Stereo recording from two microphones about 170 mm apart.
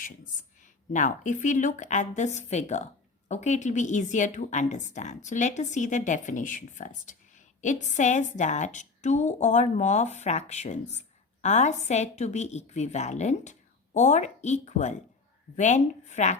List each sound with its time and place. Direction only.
0.6 s a woman's voice: 50° left (ahead or behind)